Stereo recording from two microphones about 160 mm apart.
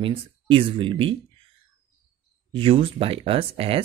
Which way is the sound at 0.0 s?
35° right (ahead or behind).